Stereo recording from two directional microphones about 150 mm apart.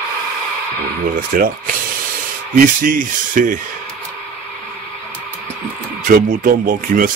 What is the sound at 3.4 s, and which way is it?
Speech, 65° right (ahead or behind).